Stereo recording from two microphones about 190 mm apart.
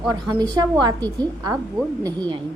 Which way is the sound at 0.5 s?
20° right (ahead or behind).